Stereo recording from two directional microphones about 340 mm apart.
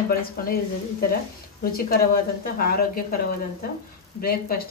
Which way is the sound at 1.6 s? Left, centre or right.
Left.